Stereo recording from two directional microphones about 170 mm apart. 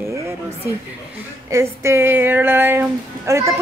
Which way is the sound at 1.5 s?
15° right (ahead or behind).